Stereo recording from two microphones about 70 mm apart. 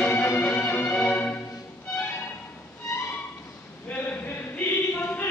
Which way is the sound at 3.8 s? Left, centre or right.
Left.